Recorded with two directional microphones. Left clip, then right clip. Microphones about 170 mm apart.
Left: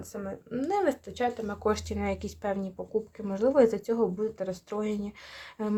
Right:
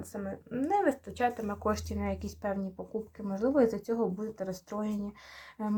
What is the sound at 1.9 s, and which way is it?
Speech, 45° left (ahead or behind).